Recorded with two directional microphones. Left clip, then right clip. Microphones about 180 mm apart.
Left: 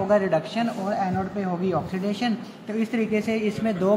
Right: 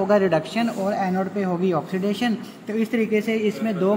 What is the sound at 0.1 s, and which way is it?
A man's voice, 25° right (ahead or behind).